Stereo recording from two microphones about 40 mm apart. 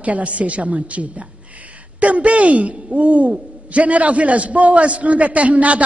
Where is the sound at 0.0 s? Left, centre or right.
Right.